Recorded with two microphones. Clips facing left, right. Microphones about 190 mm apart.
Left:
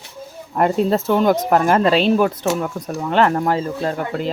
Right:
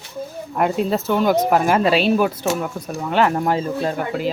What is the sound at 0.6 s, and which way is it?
Speech, 5° right (ahead or behind).